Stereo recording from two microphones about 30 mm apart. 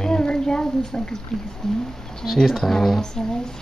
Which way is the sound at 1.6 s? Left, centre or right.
Centre.